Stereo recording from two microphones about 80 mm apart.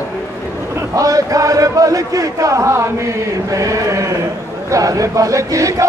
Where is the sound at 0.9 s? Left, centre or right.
Right.